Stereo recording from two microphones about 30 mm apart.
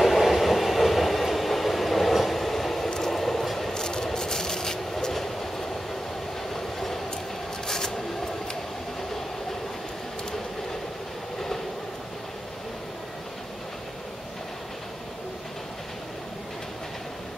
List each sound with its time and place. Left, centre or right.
0.0 s train: centre
3.7 s rub: centre
5.1 s train: centre
6.5 s train: centre
7.6 s a sound: centre